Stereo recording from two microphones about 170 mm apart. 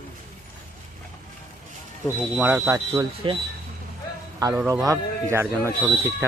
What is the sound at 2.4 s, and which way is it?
Speech, 15° right (ahead or behind).